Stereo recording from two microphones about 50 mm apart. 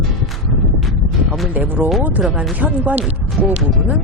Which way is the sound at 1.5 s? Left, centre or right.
Right.